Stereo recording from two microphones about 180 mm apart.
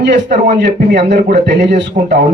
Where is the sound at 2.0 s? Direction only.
30° right (ahead or behind).